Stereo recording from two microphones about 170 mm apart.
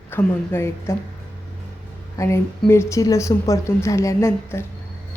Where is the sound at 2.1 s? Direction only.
15° left (ahead or behind).